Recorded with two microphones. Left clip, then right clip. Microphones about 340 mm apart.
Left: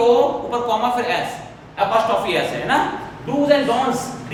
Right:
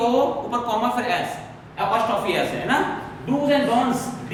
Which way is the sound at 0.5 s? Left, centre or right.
Centre.